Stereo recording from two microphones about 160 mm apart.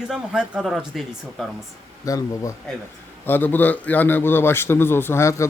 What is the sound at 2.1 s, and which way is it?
A man's voice, 20° left (ahead or behind).